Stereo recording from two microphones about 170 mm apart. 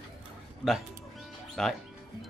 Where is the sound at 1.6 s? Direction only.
5° left (ahead or behind).